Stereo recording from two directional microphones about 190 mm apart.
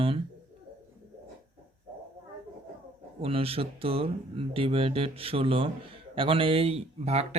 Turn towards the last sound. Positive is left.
turn(degrees=-35)  # may be behind; listen again after turning